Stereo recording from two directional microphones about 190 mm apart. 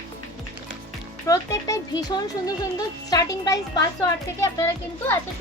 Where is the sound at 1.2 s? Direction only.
15° left (ahead or behind).